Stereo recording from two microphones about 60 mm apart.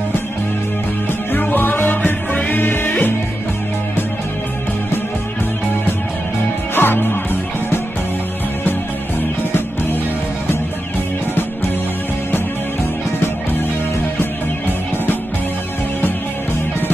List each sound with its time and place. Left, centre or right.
1.3 s music: left
6.7 s music: left